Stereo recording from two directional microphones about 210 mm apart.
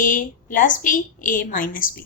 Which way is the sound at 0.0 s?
40° left (ahead or behind).